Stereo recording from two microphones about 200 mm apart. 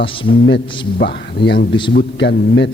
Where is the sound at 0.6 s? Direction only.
25° left (ahead or behind).